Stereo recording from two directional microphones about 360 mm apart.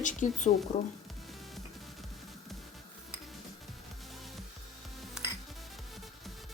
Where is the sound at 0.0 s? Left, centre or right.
Left.